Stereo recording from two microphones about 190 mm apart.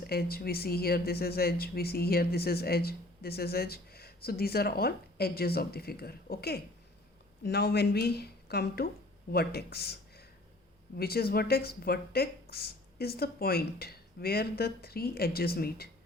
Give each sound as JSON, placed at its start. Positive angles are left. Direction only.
{"t": 0.0, "sound": "speech", "side_deg": 55}